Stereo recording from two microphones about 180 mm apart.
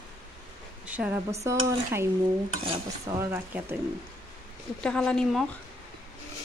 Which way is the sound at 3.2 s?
15° right (ahead or behind).